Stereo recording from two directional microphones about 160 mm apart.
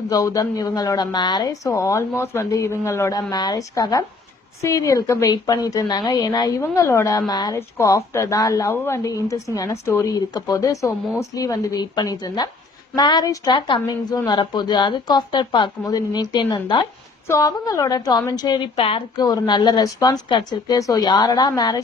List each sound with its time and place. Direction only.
0.1 s a woman's voice: 20° left (ahead or behind)